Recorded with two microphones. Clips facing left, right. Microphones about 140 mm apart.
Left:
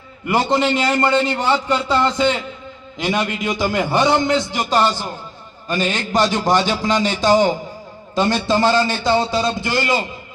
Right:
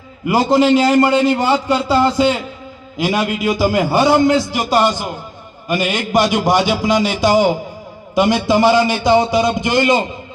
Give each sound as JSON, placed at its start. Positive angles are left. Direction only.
{"t": 0.3, "sound": "a man's voice", "side_deg": -5}